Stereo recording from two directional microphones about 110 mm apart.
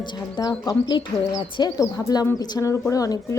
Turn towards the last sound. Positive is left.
turn(degrees=30)  # may be behind; listen again after turning